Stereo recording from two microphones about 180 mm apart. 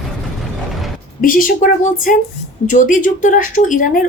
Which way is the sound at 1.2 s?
50° left (ahead or behind).